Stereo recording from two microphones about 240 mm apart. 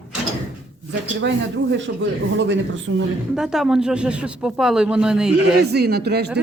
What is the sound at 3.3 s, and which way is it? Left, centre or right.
Speech, centre.